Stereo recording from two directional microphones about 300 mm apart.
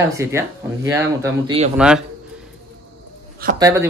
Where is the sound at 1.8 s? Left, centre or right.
Centre.